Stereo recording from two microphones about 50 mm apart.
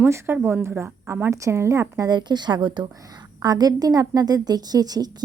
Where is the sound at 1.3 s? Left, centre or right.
Right.